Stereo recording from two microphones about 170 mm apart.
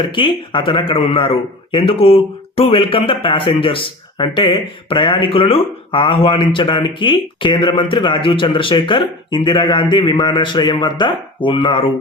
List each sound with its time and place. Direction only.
0.0 s a man's voice: 30° left (ahead or behind)